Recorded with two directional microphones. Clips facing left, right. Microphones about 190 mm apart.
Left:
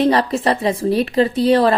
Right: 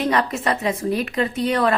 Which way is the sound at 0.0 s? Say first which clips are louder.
Left 5 dB; 30° left (ahead or behind).